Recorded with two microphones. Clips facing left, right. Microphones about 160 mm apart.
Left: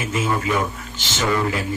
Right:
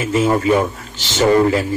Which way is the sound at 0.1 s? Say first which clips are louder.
Right 8 dB; 30° right (ahead or behind).